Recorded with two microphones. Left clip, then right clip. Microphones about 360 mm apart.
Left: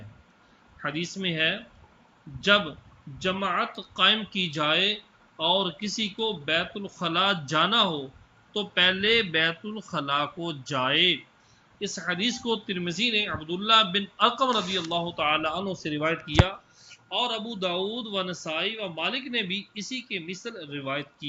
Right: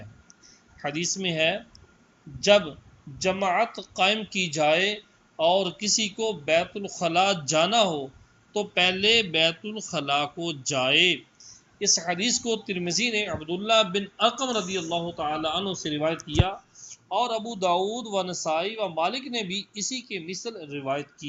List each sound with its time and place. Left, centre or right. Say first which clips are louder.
0.8 s a man's voice: right 2 dB; centre
17.1 s speech: right 2 dB; centre